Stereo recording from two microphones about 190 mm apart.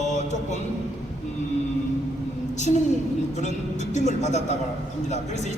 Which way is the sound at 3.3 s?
40° left (ahead or behind).